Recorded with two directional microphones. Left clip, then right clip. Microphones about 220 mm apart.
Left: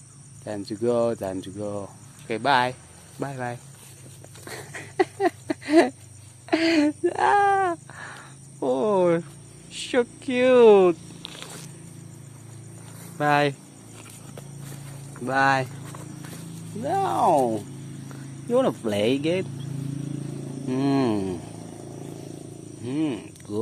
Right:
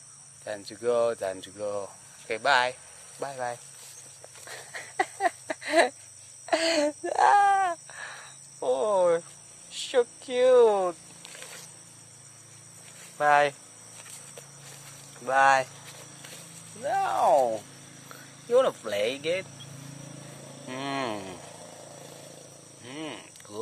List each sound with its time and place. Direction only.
0.5 s speech: centre (ahead or behind)
4.5 s a sound: 15° left (ahead or behind)
4.9 s a sound: centre (ahead or behind)
6.5 s speech: 10° right (ahead or behind)
9.7 s a sound: centre (ahead or behind)
13.2 s speech: centre (ahead or behind)
15.2 s speech: centre (ahead or behind)
16.8 s speech: centre (ahead or behind)
21.5 s vehicle: 30° right (ahead or behind)
22.8 s speech: 5° left (ahead or behind)